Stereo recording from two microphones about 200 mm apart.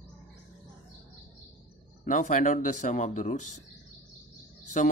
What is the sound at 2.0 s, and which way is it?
Speech, 40° left (ahead or behind).